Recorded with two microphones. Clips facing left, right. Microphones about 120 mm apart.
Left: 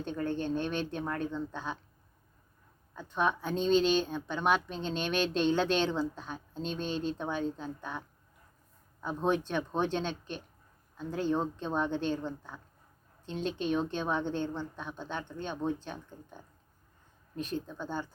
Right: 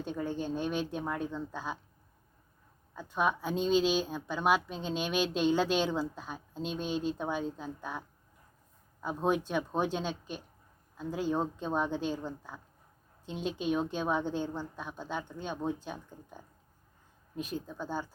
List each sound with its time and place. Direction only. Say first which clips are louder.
0.0 s speech: left 1 dB; 10° right (ahead or behind)
2.9 s speech: even; 10° right (ahead or behind)